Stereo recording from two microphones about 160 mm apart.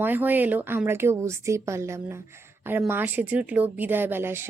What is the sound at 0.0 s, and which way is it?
Speech, 10° right (ahead or behind).